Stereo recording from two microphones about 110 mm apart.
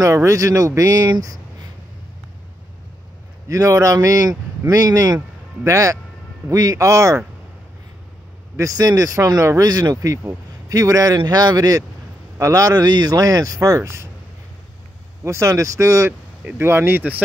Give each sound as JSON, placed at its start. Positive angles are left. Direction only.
{"t": 0.0, "sound": "speech", "side_deg": -25}
{"t": 1.2, "sound": "a sound", "side_deg": -30}
{"t": 3.4, "sound": "speech", "side_deg": -30}
{"t": 8.5, "sound": "speech", "side_deg": -30}
{"t": 15.2, "sound": "speech", "side_deg": -25}